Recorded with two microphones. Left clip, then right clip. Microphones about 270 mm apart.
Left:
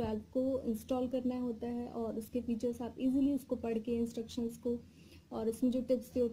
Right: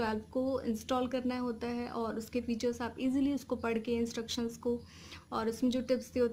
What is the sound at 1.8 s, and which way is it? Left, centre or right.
Speech, centre.